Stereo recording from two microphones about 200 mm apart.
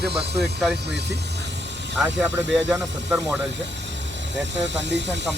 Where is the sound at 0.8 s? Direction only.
60° right (ahead or behind).